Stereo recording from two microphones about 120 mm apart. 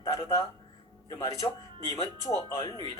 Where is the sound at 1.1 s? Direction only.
30° left (ahead or behind).